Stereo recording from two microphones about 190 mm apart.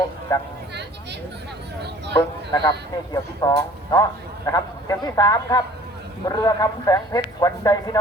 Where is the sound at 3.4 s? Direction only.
20° left (ahead or behind).